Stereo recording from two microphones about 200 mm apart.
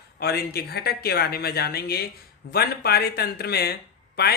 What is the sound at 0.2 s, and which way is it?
Speech, 50° left (ahead or behind).